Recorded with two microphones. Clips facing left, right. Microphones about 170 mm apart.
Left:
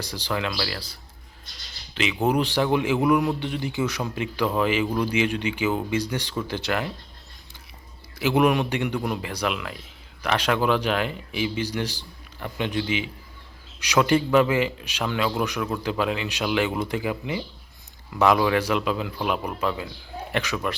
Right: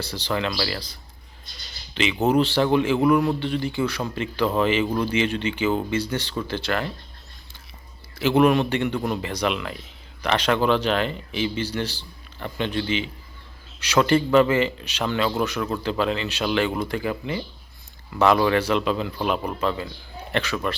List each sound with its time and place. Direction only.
0.0 s a man's voice: 10° left (ahead or behind)
2.2 s a man's voice: 10° left (ahead or behind)
8.4 s a man's voice: 15° left (ahead or behind)